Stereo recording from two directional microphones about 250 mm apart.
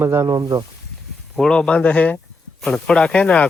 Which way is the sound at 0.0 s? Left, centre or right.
Centre.